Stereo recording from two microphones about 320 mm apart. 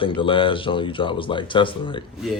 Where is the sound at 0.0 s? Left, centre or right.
Centre.